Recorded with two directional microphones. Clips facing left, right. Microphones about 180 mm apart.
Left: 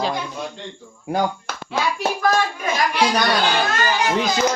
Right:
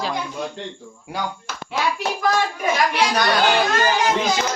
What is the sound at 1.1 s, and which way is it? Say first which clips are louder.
Speech: left 6 dB; 55° left (ahead or behind).